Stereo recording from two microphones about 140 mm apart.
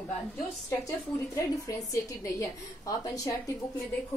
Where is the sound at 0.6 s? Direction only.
20° left (ahead or behind).